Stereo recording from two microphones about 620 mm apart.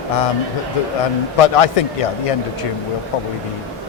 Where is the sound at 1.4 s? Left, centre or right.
Left.